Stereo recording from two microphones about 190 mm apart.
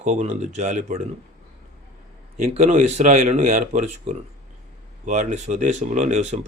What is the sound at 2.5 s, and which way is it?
Speech, 35° right (ahead or behind).